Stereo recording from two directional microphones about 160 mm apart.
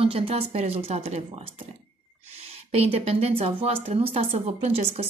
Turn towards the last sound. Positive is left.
turn(degrees=-40)  # may be behind; listen again after turning